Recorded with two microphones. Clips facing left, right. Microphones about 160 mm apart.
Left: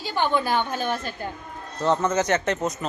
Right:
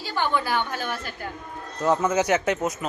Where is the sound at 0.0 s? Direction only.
20° left (ahead or behind).